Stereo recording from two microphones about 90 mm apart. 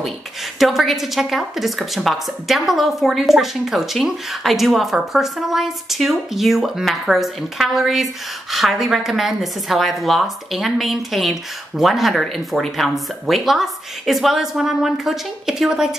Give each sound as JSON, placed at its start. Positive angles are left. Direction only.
{"t": 0.6, "sound": "a woman's voice", "side_deg": 0}